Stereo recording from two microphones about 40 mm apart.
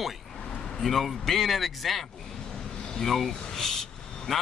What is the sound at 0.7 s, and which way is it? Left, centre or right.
A man's voice, centre.